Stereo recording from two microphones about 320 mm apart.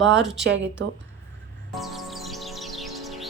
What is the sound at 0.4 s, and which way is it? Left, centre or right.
Speech, right.